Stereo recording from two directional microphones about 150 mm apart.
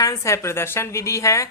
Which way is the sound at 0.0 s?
20° left (ahead or behind).